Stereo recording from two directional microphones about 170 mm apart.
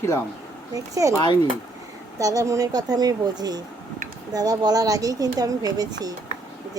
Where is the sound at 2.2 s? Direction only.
20° right (ahead or behind).